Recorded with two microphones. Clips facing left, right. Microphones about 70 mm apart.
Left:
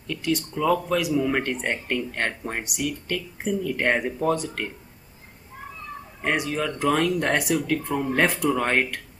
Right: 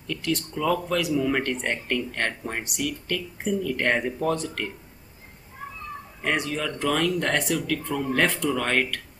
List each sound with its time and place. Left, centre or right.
0.0 s speech: centre
6.2 s speech: centre